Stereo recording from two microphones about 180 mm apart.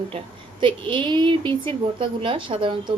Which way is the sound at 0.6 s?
25° right (ahead or behind).